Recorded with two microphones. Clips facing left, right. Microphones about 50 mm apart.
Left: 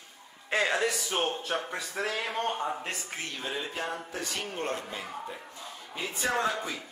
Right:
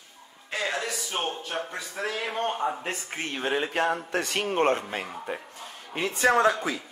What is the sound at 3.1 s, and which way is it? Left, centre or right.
A man's voice, right.